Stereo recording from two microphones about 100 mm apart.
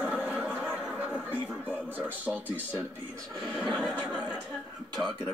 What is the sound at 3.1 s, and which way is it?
Speech, 5° left (ahead or behind).